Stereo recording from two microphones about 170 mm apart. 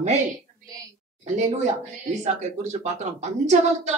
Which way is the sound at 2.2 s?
40° right (ahead or behind).